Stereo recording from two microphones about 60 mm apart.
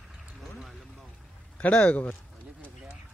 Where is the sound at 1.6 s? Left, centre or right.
Left.